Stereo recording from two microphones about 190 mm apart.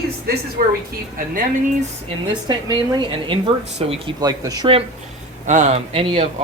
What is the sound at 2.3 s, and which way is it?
A woman's voice, 25° right (ahead or behind).